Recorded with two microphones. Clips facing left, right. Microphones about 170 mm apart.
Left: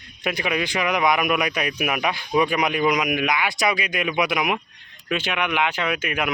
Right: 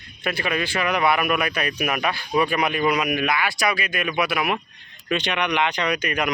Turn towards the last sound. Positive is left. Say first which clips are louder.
# right 1 dB
turn(degrees=5)  # may be behind; listen again after turning